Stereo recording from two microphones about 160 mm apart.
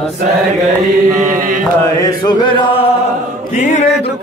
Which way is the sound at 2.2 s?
30° left (ahead or behind).